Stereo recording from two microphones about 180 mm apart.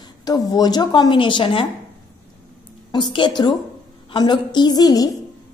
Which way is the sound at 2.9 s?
25° left (ahead or behind).